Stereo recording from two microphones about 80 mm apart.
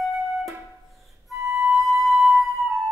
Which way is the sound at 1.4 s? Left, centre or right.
Centre.